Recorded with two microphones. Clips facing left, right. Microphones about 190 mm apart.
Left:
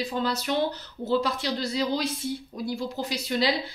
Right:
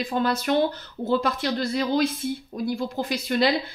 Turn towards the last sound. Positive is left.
turn(degrees=-55)  # may be behind; listen again after turning